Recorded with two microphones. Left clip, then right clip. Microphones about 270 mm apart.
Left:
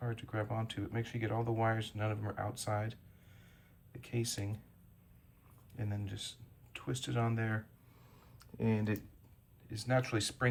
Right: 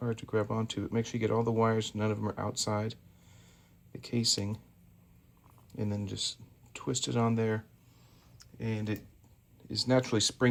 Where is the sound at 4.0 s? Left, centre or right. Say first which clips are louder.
Right 9 dB; right.